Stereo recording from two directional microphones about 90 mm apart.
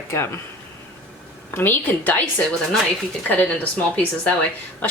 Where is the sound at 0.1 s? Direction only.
30° left (ahead or behind).